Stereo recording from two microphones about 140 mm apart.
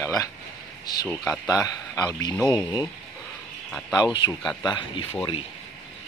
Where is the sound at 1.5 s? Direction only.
25° left (ahead or behind).